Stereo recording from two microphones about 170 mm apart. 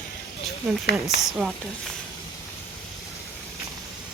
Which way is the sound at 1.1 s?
90° left.